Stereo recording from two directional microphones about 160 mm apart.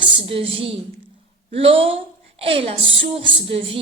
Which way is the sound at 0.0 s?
35° right (ahead or behind).